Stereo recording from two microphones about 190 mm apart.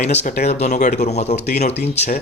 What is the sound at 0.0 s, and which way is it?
Speech, 35° left (ahead or behind).